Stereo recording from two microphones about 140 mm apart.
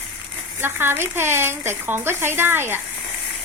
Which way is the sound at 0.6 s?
15° right (ahead or behind).